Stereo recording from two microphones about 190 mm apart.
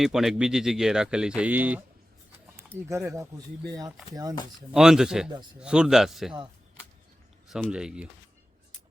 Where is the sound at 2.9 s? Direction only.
15° right (ahead or behind).